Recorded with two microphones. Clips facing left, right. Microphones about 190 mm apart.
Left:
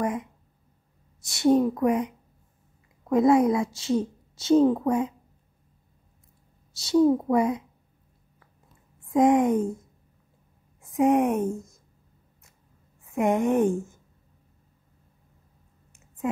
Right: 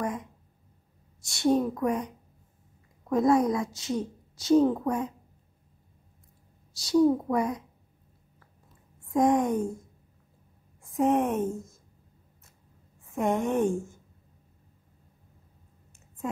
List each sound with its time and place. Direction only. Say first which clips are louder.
1.2 s a woman's voice: left 4 dB; 20° left (ahead or behind)
3.2 s a woman's voice: left 3 dB; 5° left (ahead or behind)
3.4 s a woman's voice: left 4 dB; 30° left (ahead or behind)
6.7 s a woman's voice: left 2 dB; 25° left (ahead or behind)
9.1 s a woman's voice: left 4 dB; 20° left (ahead or behind)
11.0 s a woman's voice: left 3 dB; 15° left (ahead or behind)
13.1 s a woman's voice: left 4 dB; 15° left (ahead or behind)